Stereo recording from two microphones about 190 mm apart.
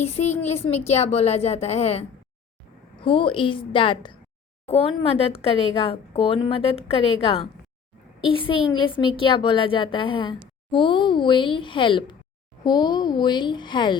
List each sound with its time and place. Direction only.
0.0 s a woman's voice: 35° left (ahead or behind)